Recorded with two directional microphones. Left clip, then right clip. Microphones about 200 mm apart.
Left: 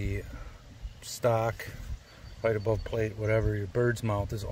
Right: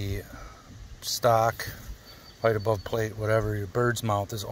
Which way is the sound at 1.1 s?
5° left (ahead or behind).